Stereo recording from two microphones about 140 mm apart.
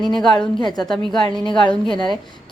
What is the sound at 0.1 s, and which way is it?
Speech, 5° left (ahead or behind).